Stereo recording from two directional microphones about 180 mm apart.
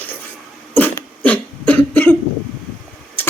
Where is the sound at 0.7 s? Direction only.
10° left (ahead or behind).